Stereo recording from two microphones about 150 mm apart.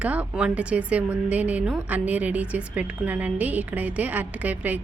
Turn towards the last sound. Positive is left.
turn(degrees=-10)  # may be behind; listen again after turning